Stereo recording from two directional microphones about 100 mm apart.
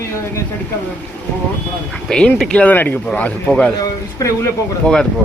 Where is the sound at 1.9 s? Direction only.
10° left (ahead or behind).